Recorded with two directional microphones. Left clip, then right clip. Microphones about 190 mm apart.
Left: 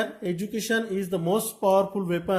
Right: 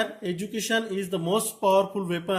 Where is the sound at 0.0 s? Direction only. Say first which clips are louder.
Even; 45° left (ahead or behind).